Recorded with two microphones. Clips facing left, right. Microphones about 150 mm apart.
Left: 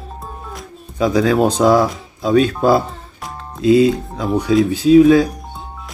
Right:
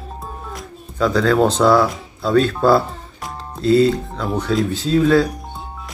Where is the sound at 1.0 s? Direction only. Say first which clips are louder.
Left 1 dB; 15° left (ahead or behind).